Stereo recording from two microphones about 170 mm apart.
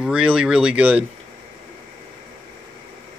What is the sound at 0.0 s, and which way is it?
Speech, 5° right (ahead or behind).